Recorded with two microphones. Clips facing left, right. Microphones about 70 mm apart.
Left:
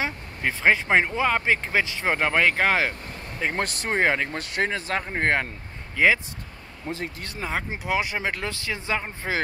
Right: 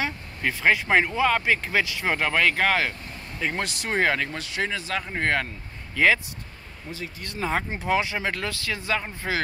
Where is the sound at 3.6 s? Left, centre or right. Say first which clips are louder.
Left 2 dB; left.